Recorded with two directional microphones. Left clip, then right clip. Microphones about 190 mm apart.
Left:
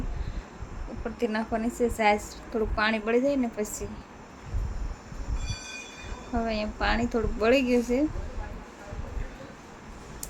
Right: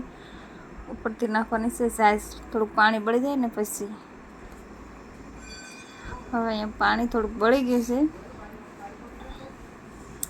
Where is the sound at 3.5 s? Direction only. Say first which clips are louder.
Right 3 dB; 40° right (ahead or behind).